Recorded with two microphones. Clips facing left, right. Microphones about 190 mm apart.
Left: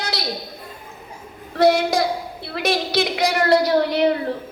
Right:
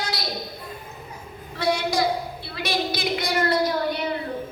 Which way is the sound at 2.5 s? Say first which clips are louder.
Left 6 dB; 70° left (ahead or behind).